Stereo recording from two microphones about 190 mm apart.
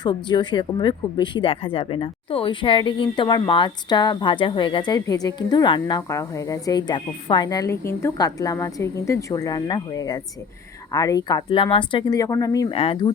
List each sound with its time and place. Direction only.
0.0 s speech: 25° left (ahead or behind)
12.7 s speech: 30° left (ahead or behind)